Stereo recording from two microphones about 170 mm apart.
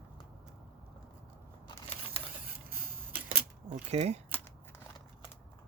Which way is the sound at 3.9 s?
40° right (ahead or behind).